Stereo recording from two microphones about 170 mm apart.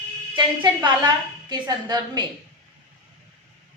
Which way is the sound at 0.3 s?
25° right (ahead or behind).